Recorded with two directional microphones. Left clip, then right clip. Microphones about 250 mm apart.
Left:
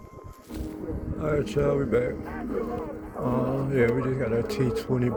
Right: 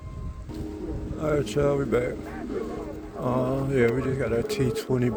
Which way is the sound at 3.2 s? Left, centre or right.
Centre.